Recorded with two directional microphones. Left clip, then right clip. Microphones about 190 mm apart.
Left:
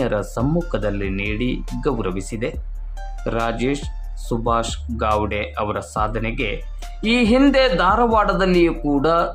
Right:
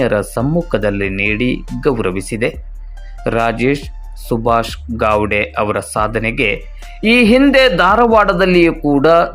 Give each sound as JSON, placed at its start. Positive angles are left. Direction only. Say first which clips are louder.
{"t": 0.0, "sound": "speech", "louder": "right 6 dB", "side_deg": -20}